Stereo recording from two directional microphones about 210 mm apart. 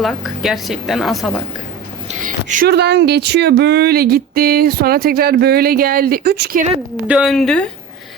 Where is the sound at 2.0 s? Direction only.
35° right (ahead or behind).